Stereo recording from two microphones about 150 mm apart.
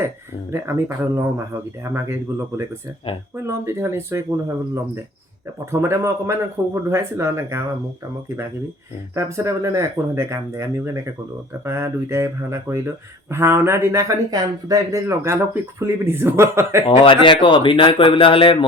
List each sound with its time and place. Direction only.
0.5 s speech: 15° right (ahead or behind)
3.4 s speech: 15° right (ahead or behind)
9.1 s speech: 20° right (ahead or behind)
17.0 s speech: 35° left (ahead or behind)